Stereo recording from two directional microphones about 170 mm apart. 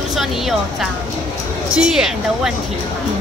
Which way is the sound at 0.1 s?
Centre (ahead or behind).